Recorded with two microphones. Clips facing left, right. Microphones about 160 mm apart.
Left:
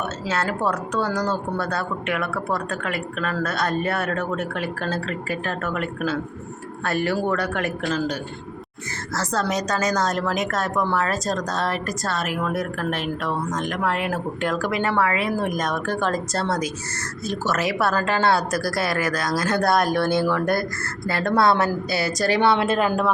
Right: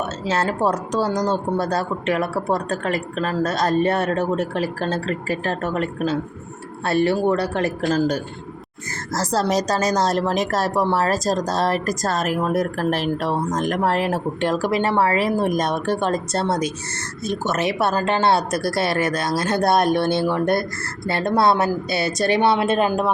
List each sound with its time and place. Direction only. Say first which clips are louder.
0.3 s a woman's voice: right 4 dB; 35° right (ahead or behind)